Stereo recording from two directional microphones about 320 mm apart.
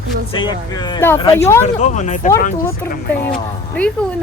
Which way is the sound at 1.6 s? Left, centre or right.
Left.